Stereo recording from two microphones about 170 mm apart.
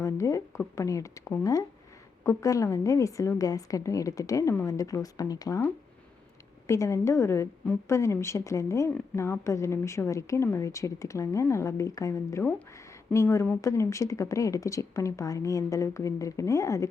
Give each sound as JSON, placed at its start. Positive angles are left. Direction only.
{"t": 0.0, "sound": "speech", "side_deg": 20}